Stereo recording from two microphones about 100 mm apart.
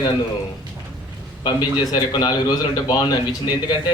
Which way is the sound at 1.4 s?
45° left (ahead or behind).